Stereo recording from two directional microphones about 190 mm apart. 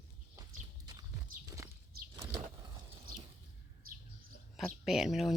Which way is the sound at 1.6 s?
15° right (ahead or behind).